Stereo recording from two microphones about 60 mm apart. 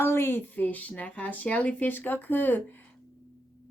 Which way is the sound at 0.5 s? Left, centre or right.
Left.